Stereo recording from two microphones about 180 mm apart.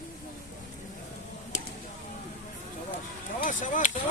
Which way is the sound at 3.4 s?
45° left (ahead or behind).